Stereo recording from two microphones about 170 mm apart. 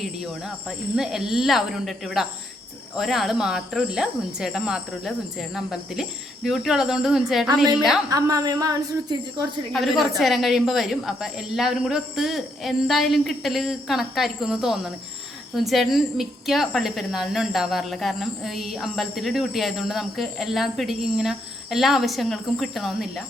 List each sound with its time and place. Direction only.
0.0 s a woman's voice: centre (ahead or behind)
8.1 s a woman's voice: 20° right (ahead or behind)
10.0 s a woman's voice: centre (ahead or behind)